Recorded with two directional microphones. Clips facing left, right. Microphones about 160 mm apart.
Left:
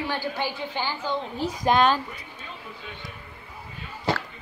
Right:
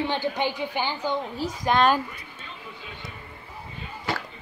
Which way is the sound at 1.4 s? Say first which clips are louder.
Left 3 dB; 20° left (ahead or behind).